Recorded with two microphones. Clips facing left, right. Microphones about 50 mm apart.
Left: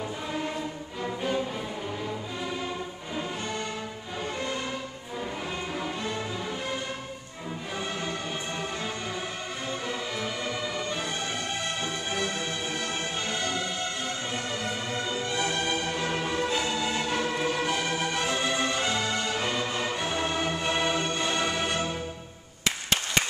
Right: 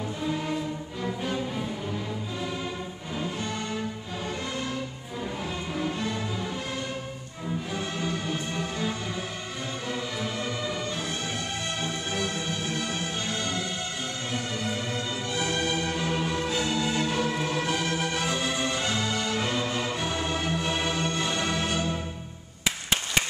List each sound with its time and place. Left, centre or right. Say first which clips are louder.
1.0 s music: left 2 dB; centre
5.8 s music: right 5 dB; centre
7.7 s music: left 1 dB; centre
11.8 s music: even; centre